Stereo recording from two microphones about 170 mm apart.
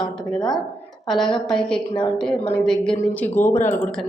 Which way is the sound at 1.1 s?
Centre (ahead or behind).